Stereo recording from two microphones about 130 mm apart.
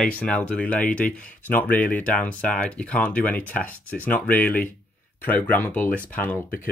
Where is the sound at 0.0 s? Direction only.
10° left (ahead or behind).